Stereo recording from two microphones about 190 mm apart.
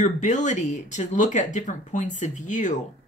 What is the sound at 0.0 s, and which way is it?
Speech, 40° left (ahead or behind).